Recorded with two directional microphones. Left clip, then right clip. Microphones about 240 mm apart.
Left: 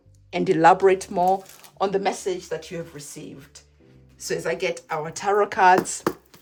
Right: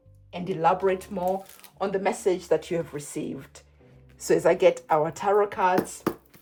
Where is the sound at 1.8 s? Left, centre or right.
Centre.